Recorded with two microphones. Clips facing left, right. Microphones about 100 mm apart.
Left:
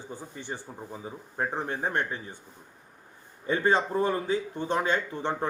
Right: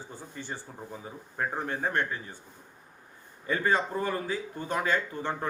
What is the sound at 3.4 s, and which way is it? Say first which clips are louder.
A man's voice: left 2 dB; 25° left (ahead or behind).